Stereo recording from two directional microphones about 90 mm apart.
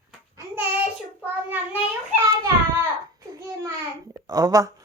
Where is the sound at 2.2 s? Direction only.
35° right (ahead or behind).